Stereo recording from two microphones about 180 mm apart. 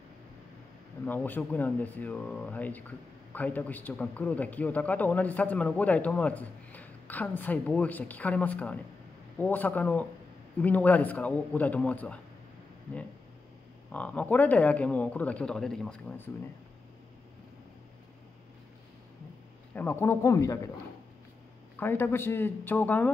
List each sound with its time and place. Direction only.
1.0 s a man's voice: 10° left (ahead or behind)
13.9 s a man's voice: 10° left (ahead or behind)
19.7 s a man's voice: 10° left (ahead or behind)
21.7 s a man's voice: 10° left (ahead or behind)